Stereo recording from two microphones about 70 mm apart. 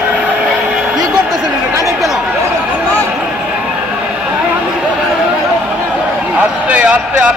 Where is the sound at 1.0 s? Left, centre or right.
Right.